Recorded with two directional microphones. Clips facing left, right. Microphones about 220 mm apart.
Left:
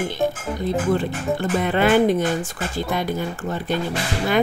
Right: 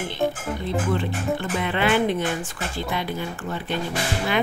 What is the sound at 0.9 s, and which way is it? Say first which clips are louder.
Speech: left 2 dB; 40° left (ahead or behind).